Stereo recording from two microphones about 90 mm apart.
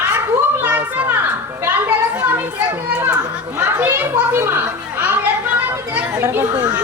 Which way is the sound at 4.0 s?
20° right (ahead or behind).